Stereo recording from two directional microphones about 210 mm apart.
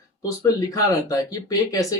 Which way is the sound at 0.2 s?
15° left (ahead or behind).